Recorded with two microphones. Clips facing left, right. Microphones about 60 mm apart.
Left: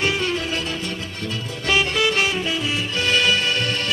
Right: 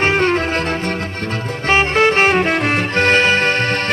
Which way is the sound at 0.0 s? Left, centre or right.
Right.